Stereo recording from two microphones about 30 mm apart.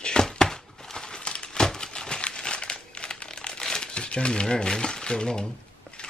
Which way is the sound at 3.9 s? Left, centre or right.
Left.